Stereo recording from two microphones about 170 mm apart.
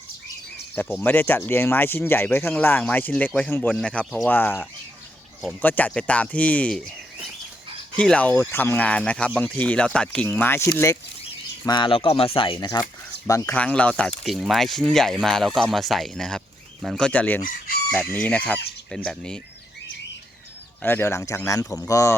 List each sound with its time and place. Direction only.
1.0 s speech: 10° left (ahead or behind)
11.6 s speech: 25° left (ahead or behind); by 17.4 s 10° left (ahead or behind)
17.4 s chicken: 60° left (ahead or behind)
17.9 s speech: 10° left (ahead or behind)
20.8 s speech: 15° left (ahead or behind)